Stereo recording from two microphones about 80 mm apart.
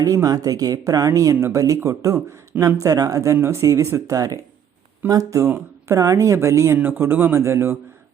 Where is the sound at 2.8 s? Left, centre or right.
Right.